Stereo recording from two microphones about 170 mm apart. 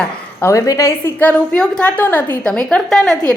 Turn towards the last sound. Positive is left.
turn(degrees=0)  # may be behind; listen again after turning